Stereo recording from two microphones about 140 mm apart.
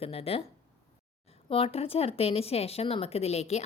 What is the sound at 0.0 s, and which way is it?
Speech, 45° left (ahead or behind).